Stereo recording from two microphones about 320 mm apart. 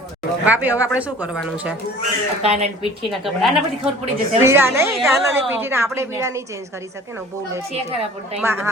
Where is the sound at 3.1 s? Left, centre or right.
Centre.